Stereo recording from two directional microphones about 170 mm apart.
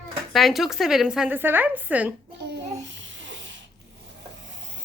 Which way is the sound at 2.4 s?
90° right.